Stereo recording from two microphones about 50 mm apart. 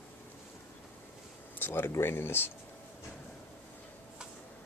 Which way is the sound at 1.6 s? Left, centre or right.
Left.